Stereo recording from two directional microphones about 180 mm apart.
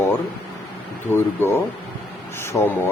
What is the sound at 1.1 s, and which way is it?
Speech, 10° left (ahead or behind).